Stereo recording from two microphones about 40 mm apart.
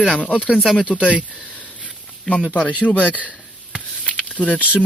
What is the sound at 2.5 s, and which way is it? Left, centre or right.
Speech, left.